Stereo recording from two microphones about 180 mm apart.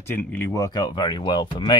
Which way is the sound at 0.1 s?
10° left (ahead or behind).